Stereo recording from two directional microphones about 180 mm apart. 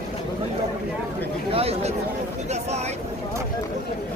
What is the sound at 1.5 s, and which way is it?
Chatter, 35° right (ahead or behind).